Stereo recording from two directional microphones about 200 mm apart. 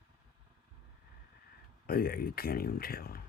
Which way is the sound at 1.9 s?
50° left (ahead or behind).